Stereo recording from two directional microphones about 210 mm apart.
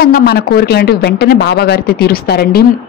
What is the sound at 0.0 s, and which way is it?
Speech, 50° left (ahead or behind).